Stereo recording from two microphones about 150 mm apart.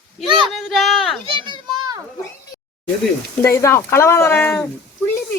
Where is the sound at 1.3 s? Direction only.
35° right (ahead or behind).